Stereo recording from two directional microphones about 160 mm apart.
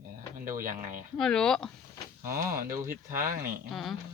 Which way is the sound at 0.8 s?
60° right (ahead or behind).